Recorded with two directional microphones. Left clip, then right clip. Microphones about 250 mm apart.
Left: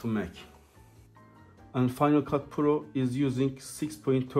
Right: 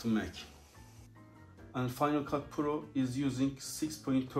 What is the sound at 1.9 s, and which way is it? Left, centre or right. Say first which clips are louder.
Speech: left 7 dB; left.